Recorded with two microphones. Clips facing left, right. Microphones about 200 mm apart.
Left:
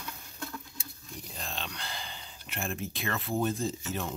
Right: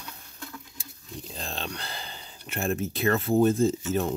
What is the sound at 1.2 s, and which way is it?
Speech, 35° right (ahead or behind).